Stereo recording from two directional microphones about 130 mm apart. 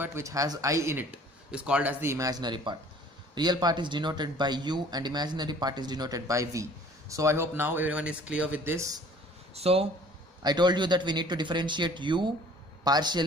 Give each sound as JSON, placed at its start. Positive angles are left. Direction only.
{"t": 0.0, "sound": "a man's voice", "side_deg": -20}
{"t": 9.5, "sound": "speech", "side_deg": -50}
{"t": 10.4, "sound": "speech", "side_deg": -35}